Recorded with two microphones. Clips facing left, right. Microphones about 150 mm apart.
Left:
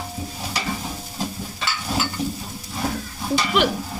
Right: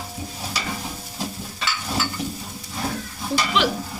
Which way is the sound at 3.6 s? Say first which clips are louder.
Left 2 dB; 50° left (ahead or behind).